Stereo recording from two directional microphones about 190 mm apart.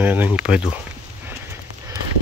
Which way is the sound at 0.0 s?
10° right (ahead or behind).